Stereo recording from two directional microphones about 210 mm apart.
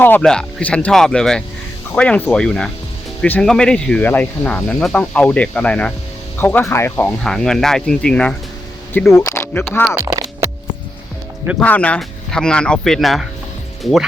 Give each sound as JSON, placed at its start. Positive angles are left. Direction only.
{"t": 0.0, "sound": "speech", "side_deg": 5}
{"t": 10.0, "sound": "a sound", "side_deg": -15}
{"t": 11.6, "sound": "speech", "side_deg": 5}